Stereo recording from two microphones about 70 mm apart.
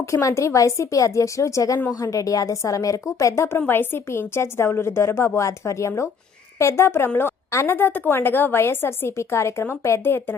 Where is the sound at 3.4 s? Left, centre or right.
Left.